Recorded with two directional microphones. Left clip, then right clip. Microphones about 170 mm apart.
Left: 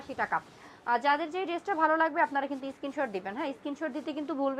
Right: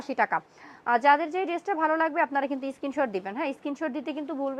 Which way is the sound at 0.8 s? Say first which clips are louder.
Right 6 dB; 45° right (ahead or behind).